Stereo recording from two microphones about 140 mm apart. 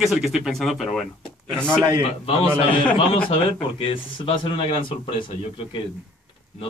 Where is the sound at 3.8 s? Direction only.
40° left (ahead or behind).